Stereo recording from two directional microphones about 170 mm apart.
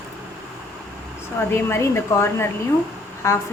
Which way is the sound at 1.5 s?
15° left (ahead or behind).